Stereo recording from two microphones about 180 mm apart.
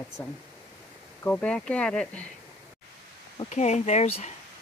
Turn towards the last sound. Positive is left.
turn(degrees=35)  # may be behind; listen again after turning